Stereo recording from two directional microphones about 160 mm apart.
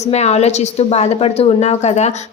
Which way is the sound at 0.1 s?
45° left (ahead or behind).